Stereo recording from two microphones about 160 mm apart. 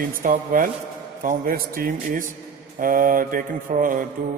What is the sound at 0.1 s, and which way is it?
Mantra, 60° right (ahead or behind).